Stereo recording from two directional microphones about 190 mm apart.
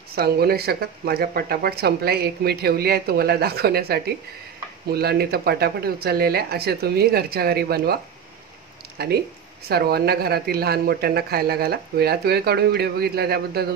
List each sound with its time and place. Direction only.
0.1 s speech: 55° right (ahead or behind)
8.9 s speech: 55° right (ahead or behind)